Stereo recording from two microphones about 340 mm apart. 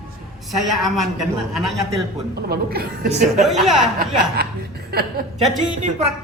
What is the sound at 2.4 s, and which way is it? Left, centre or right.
Speech, right.